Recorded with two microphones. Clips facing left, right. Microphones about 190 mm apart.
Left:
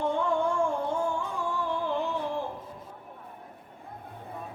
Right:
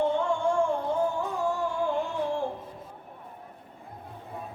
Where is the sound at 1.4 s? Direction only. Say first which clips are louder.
Right 3 dB; 40° right (ahead or behind).